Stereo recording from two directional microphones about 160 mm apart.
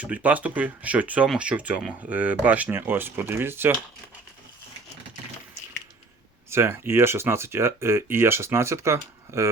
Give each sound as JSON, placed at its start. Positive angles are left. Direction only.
{"t": 0.0, "sound": "speech", "side_deg": -10}
{"t": 6.5, "sound": "speech", "side_deg": -15}